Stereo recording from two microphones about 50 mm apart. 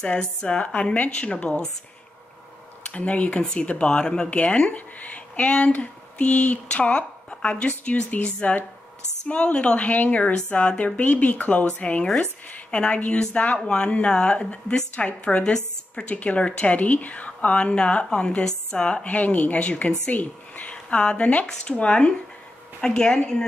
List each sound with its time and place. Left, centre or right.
0.0 s speech: centre
2.9 s speech: left
4.7 s speech: left
11.0 s speech: left
19.0 s a woman's voice: left; by 23.4 s centre